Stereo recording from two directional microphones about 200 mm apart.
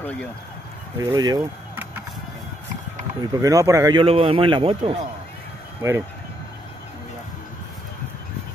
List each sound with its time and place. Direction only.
0.0 s speech: 5° left (ahead or behind)
0.9 s speech: 15° right (ahead or behind)
3.3 s a man's voice: 15° right (ahead or behind)
5.8 s speech: 15° right (ahead or behind)